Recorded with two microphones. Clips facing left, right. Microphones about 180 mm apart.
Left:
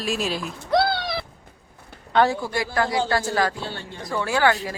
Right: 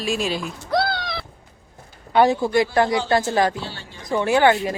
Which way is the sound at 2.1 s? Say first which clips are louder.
Right 4 dB; 15° right (ahead or behind).